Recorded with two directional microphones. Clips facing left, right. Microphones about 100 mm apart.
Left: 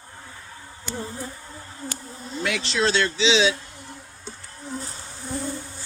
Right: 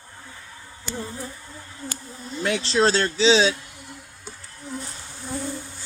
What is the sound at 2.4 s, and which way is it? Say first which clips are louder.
Speech: right 3 dB; 35° right (ahead or behind).